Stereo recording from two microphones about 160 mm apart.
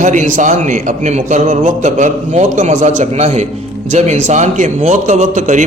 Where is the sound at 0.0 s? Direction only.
50° right (ahead or behind).